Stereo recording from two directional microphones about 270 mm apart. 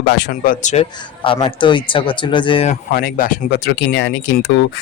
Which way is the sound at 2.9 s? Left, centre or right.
Left.